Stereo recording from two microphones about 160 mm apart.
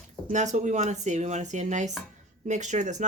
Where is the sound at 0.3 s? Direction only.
50° right (ahead or behind).